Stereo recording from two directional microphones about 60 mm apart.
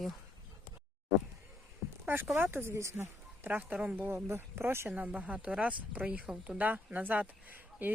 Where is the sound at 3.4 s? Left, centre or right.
Right.